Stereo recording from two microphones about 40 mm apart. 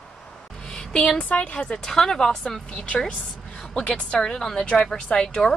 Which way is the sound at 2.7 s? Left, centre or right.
Left.